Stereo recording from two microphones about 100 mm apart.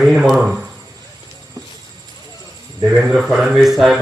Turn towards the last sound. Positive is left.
turn(degrees=-5)  # may be behind; listen again after turning